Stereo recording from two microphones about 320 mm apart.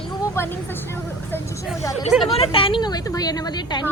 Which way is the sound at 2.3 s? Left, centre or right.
Centre.